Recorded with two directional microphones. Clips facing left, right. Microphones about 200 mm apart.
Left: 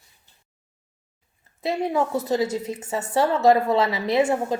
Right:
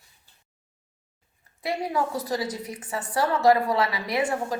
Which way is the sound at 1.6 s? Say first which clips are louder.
Left 4 dB; 25° left (ahead or behind).